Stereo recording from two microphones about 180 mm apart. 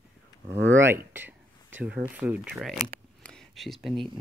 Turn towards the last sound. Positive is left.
turn(degrees=0)  # may be behind; listen again after turning